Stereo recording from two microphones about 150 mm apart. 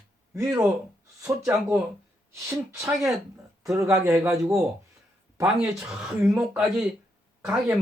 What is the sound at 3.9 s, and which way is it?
Speech, 20° right (ahead or behind).